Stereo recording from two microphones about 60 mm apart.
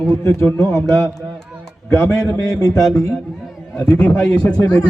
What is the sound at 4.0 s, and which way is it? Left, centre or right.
Speech, left.